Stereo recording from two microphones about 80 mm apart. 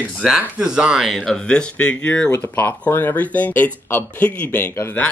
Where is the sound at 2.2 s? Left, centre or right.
Left.